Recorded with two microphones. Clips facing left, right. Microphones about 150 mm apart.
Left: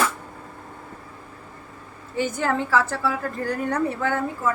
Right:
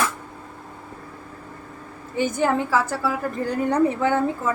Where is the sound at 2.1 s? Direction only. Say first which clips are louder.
Right 3 dB; 15° right (ahead or behind).